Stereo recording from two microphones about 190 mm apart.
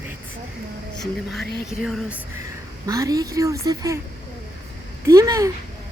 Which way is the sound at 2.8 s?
20° right (ahead or behind).